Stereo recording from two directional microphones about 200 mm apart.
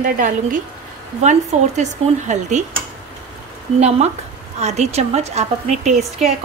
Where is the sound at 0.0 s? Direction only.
40° right (ahead or behind).